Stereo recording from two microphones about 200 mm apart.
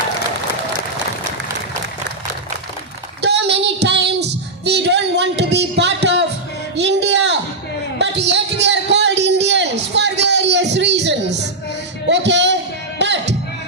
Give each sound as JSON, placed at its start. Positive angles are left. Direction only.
{"t": 3.2, "sound": "child singing", "side_deg": -60}
{"t": 6.7, "sound": "music", "side_deg": -60}
{"t": 7.9, "sound": "a sound", "side_deg": -60}
{"t": 13.0, "sound": "music", "side_deg": -60}